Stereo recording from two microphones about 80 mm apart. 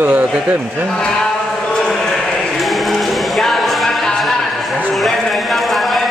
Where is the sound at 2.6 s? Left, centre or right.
Centre.